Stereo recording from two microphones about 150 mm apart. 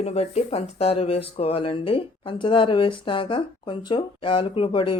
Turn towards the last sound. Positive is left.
turn(degrees=35)  # may be behind; listen again after turning